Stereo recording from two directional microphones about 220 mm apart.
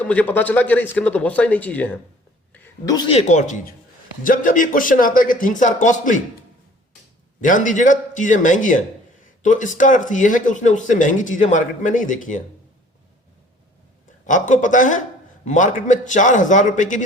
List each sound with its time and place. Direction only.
0.0 s a man's voice: 5° left (ahead or behind)
2.5 s a sound: 15° left (ahead or behind)
3.1 s speech: 30° left (ahead or behind)
7.4 s speech: 35° left (ahead or behind)
14.3 s speech: 35° left (ahead or behind)